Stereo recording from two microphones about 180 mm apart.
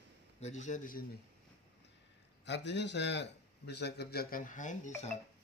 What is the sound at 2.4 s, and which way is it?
A man's voice, 75° left (ahead or behind).